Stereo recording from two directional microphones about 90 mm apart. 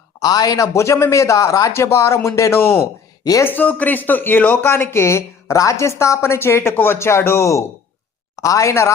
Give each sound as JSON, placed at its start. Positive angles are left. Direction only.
{"t": 0.2, "sound": "a man's voice", "side_deg": 45}
{"t": 3.4, "sound": "a man's voice", "side_deg": 20}